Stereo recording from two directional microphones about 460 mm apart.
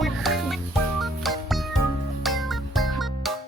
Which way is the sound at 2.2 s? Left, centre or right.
Centre.